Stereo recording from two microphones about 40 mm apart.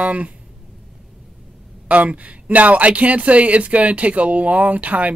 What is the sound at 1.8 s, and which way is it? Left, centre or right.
Speech, right.